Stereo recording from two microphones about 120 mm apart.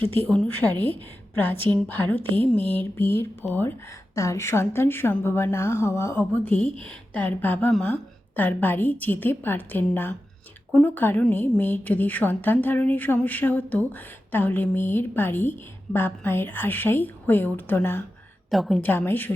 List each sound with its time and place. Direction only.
0.2 s a woman's voice: 15° left (ahead or behind)
18.5 s a woman's voice: centre (ahead or behind)
18.8 s a woman's voice: 20° left (ahead or behind)